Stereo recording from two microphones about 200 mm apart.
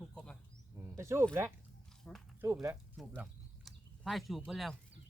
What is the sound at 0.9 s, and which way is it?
Speech, 15° right (ahead or behind).